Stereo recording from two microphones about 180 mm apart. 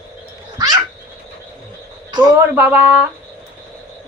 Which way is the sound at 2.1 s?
20° right (ahead or behind).